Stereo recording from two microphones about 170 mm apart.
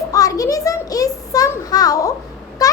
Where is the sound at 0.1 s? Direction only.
20° left (ahead or behind).